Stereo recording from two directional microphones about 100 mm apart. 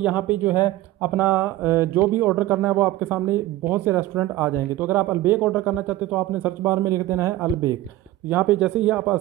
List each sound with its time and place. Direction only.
0.0 s speech: 15° right (ahead or behind)
6.7 s speech: 35° right (ahead or behind)
8.3 s speech: 15° right (ahead or behind)